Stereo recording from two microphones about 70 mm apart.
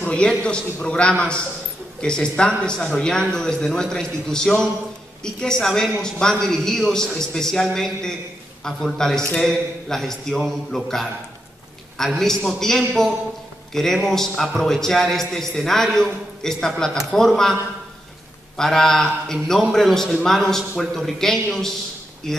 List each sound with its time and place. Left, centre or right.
0.0 s a man's voice: centre
12.2 s a man's voice: centre
18.6 s a man's voice: centre